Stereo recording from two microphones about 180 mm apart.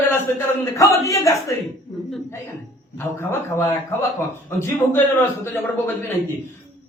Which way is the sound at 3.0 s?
15° left (ahead or behind).